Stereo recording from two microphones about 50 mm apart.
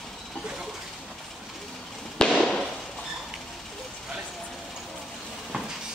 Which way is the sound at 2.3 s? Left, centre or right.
Centre.